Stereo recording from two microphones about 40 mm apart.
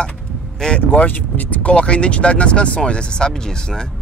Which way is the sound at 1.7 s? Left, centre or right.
Left.